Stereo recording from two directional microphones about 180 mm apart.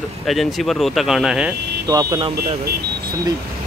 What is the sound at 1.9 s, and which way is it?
Speech, 20° right (ahead or behind).